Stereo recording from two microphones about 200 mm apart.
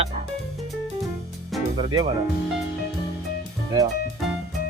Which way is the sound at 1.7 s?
20° right (ahead or behind).